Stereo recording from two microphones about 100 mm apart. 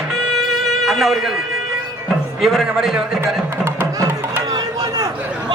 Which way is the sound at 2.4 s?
Centre (ahead or behind).